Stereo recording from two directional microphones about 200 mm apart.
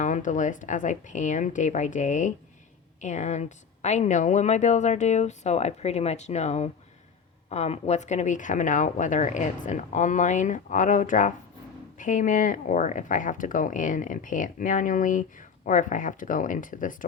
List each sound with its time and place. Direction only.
0.0 s speech: 40° left (ahead or behind)